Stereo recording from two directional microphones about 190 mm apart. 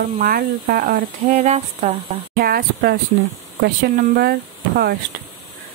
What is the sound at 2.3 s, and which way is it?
Speech, 50° right (ahead or behind).